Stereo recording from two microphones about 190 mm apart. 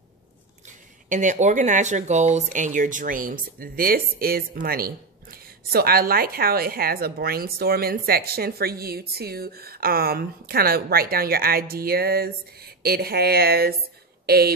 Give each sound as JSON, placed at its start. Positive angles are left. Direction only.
{"t": 1.0, "sound": "a woman's voice", "side_deg": -40}